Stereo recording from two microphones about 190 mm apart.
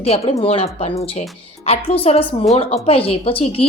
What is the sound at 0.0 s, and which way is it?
Speech, 30° left (ahead or behind).